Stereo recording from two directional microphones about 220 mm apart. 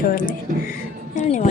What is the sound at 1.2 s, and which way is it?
Music, 35° left (ahead or behind).